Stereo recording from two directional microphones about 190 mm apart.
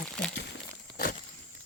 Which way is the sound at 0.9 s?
45° left (ahead or behind).